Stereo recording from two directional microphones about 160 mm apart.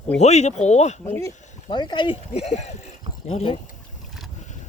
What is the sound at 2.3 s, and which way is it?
Speech, 45° left (ahead or behind).